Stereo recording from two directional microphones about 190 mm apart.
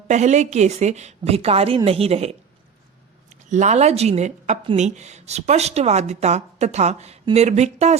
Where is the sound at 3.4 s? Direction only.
40° right (ahead or behind).